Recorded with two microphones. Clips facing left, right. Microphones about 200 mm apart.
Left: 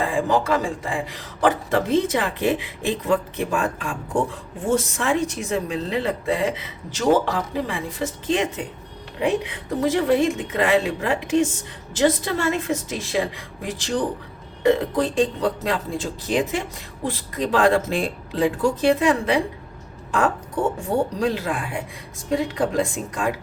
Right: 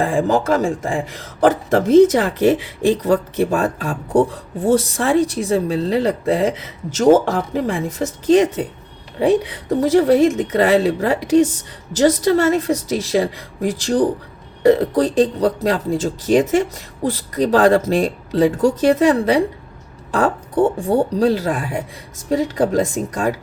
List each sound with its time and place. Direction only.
0.0 s speech: 45° right (ahead or behind)